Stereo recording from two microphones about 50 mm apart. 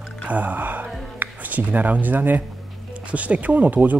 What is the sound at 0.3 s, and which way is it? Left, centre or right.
Music, right.